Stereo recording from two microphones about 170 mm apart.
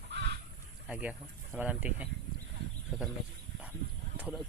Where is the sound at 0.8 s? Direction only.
5° right (ahead or behind).